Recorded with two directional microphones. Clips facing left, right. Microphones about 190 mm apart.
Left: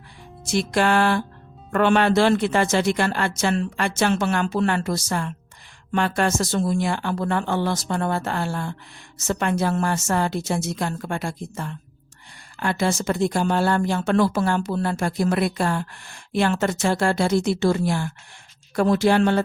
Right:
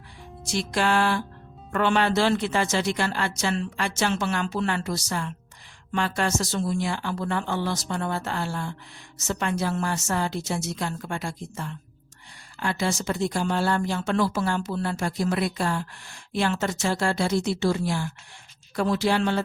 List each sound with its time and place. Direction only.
0.4 s a woman's voice: 55° left (ahead or behind)